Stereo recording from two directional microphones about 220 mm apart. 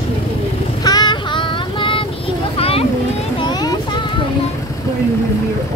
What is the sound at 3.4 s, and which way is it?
Vehicle, 20° left (ahead or behind).